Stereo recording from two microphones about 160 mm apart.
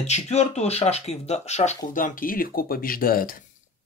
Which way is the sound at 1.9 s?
60° left (ahead or behind).